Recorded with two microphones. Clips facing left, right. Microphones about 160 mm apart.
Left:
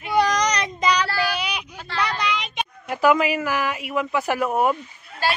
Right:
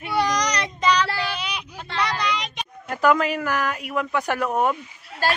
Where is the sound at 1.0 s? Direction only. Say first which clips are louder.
Left 3 dB; 25° right (ahead or behind).